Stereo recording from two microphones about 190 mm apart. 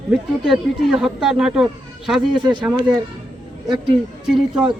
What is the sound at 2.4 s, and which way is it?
Speech, 20° right (ahead or behind).